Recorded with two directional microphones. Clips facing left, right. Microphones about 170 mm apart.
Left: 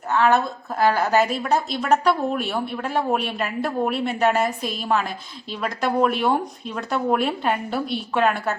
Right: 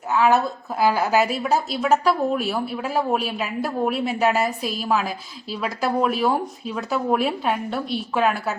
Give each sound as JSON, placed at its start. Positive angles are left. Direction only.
{"t": 0.1, "sound": "a woman's voice", "side_deg": -5}